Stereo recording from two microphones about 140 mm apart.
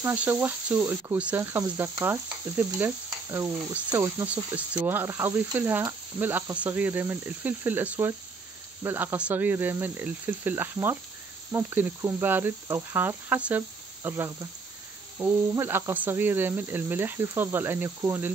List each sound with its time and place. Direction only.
0.0 s speech: 15° right (ahead or behind)
4.3 s speech: 10° right (ahead or behind)